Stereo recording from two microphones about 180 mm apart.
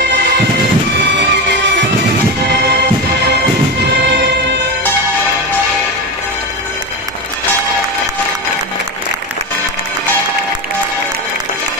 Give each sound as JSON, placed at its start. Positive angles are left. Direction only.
{"t": 1.1, "sound": "music", "side_deg": -80}
{"t": 4.1, "sound": "music", "side_deg": -80}